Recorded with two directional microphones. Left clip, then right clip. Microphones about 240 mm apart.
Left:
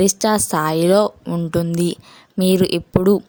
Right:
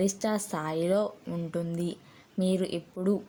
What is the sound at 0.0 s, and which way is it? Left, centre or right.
Speech, left.